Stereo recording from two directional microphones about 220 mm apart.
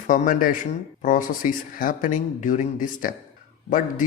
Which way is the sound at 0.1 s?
40° left (ahead or behind).